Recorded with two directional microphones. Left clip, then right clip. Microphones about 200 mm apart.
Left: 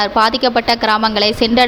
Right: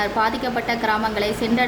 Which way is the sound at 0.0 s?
40° left (ahead or behind).